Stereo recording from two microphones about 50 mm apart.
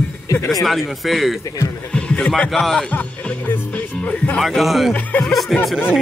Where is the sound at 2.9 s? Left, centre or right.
Left.